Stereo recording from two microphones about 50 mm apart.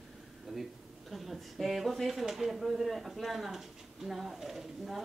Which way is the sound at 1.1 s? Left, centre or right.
Centre.